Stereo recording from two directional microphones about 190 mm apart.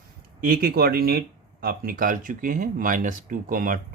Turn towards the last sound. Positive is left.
turn(degrees=-45)  # may be behind; listen again after turning